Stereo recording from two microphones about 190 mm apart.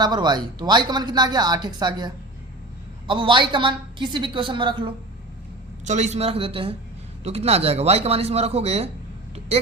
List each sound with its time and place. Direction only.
0.0 s speech: 20° right (ahead or behind)
5.8 s speech: 40° right (ahead or behind)